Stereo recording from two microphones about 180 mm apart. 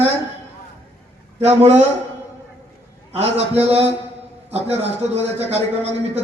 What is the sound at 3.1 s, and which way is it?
Speech, 35° right (ahead or behind).